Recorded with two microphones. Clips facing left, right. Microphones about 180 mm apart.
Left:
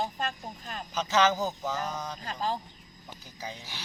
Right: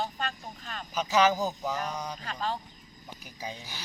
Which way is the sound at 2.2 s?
25° left (ahead or behind).